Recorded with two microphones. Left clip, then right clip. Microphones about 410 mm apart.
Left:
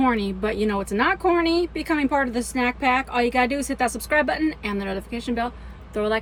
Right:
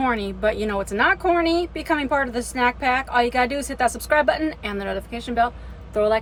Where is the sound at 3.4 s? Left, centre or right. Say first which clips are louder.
Right 1 dB; centre.